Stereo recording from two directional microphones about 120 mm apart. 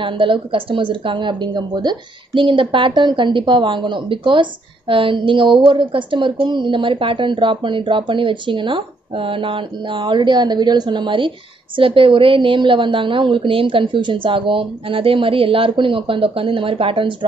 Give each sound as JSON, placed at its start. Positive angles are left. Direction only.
{"t": 0.0, "sound": "a woman's voice", "side_deg": -45}